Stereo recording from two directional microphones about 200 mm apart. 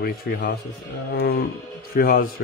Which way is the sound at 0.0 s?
50° left (ahead or behind).